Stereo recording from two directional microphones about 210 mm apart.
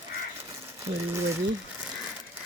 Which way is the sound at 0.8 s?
15° right (ahead or behind).